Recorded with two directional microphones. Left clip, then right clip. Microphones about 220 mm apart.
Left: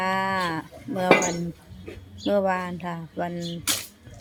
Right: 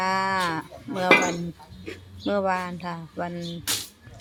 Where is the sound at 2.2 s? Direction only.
5° left (ahead or behind).